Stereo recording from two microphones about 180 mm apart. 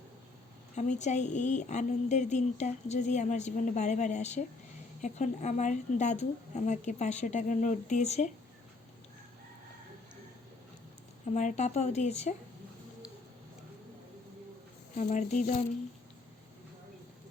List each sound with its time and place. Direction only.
0.8 s speech: 40° left (ahead or behind)
11.3 s speech: 40° left (ahead or behind)
14.9 s speech: 45° left (ahead or behind)